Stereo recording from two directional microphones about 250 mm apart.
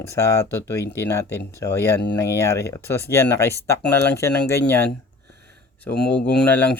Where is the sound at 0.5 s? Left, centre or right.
Centre.